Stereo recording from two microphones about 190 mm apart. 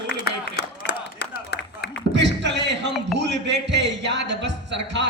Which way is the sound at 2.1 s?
65° right (ahead or behind).